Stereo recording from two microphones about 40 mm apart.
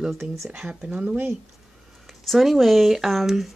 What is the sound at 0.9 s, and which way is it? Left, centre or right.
Speech, right.